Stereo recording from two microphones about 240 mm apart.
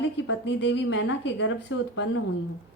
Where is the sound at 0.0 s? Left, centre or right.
Left.